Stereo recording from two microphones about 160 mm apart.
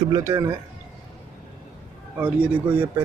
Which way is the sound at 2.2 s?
10° right (ahead or behind).